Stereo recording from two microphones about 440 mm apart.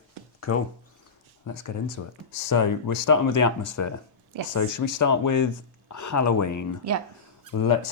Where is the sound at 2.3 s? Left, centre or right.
Left.